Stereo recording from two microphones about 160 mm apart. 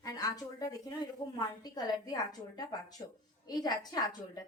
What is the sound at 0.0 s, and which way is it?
A woman's voice, 20° left (ahead or behind).